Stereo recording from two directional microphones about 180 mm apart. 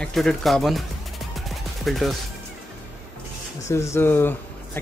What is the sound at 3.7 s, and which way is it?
Speech, 15° left (ahead or behind).